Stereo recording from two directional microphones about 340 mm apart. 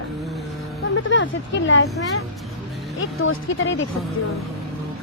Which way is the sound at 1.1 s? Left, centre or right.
Left.